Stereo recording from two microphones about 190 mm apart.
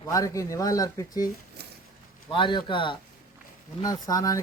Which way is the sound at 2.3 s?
25° left (ahead or behind).